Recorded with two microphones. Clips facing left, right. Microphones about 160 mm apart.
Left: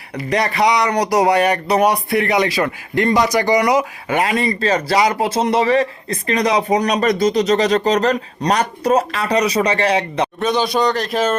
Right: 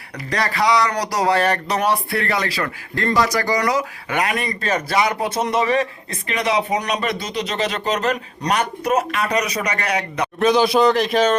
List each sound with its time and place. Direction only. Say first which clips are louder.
0.3 s speech: left 3 dB; 20° left (ahead or behind)
10.4 s a man's voice: right 4 dB; centre (ahead or behind)